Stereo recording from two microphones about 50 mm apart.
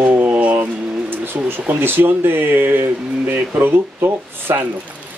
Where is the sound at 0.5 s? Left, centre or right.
Right.